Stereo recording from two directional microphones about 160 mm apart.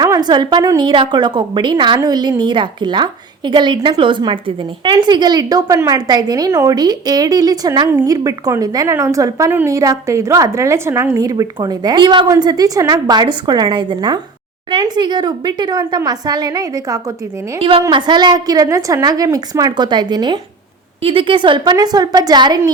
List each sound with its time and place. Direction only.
0.0 s a woman's voice: 25° right (ahead or behind)
17.6 s a woman's voice: 35° right (ahead or behind)